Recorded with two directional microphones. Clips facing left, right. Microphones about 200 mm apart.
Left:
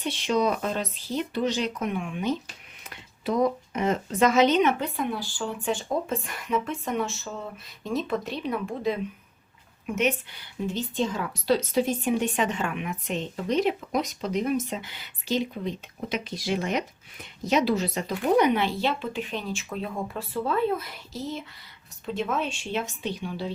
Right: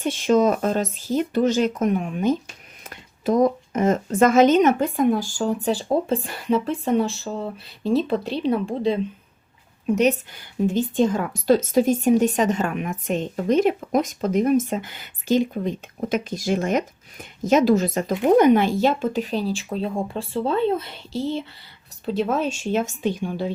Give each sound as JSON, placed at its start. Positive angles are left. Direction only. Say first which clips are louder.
{"t": 0.0, "sound": "a woman's voice", "louder": "right 7 dB", "side_deg": -45}